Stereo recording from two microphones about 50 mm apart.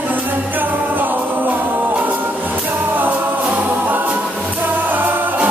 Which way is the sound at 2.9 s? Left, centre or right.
Right.